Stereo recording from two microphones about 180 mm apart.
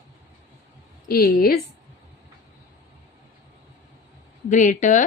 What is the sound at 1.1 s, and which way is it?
Speech, 55° left (ahead or behind).